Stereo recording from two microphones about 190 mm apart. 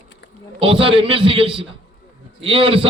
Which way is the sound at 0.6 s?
30° right (ahead or behind).